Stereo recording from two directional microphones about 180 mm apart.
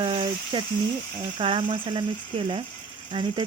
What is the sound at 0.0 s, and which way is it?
A child's voice, 30° right (ahead or behind).